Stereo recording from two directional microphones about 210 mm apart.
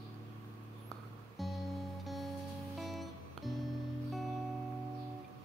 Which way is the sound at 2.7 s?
Centre (ahead or behind).